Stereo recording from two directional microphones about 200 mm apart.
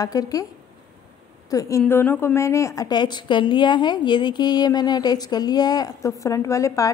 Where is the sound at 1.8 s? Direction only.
10° left (ahead or behind).